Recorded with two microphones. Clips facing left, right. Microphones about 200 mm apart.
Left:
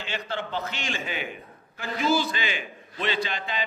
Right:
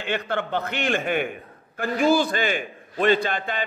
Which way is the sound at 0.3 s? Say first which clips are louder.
Right 5 dB; 55° right (ahead or behind).